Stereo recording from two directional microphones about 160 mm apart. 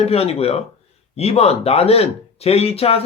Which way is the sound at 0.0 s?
40° left (ahead or behind).